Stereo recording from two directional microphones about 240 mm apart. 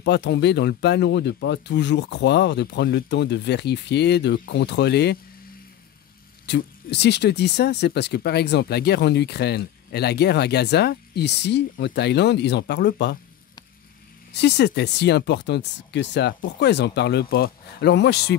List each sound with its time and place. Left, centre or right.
0.0 s speech: left
6.4 s speech: left
14.3 s speech: left